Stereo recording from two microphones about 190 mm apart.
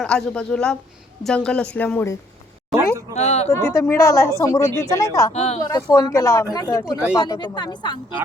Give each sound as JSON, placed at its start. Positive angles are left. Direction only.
{"t": 0.0, "sound": "a woman's voice", "side_deg": 5}
{"t": 2.7, "sound": "speech", "side_deg": -15}
{"t": 3.2, "sound": "speech", "side_deg": 35}
{"t": 3.5, "sound": "a woman's voice", "side_deg": 15}
{"t": 5.3, "sound": "speech", "side_deg": 35}
{"t": 5.6, "sound": "speech", "side_deg": 20}